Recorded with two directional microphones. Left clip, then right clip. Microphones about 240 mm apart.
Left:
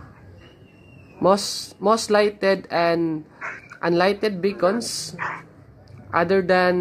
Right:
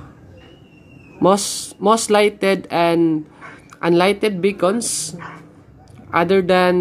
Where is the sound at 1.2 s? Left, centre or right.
Centre.